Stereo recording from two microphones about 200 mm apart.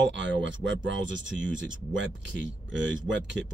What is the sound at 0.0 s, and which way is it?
Speech, 65° right (ahead or behind).